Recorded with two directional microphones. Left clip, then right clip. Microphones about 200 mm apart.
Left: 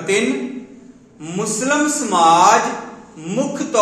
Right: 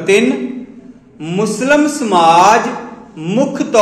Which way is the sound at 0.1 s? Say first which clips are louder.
Right 6 dB; 35° right (ahead or behind).